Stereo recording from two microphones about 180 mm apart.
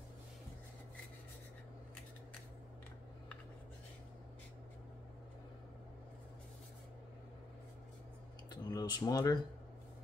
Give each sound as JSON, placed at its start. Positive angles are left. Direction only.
{"t": 8.5, "sound": "speech", "side_deg": 20}